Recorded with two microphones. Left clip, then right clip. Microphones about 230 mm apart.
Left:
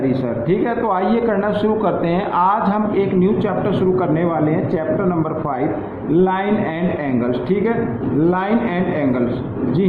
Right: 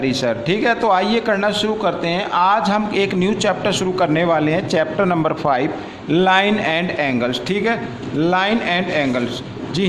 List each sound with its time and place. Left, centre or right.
0.6 s a man's voice: right
6.1 s a man's voice: right
8.3 s a man's voice: right